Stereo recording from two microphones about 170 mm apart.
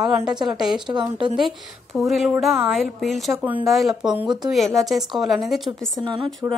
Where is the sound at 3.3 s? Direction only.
10° right (ahead or behind).